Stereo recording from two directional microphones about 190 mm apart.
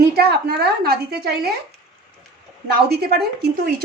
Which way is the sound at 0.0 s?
55° right (ahead or behind).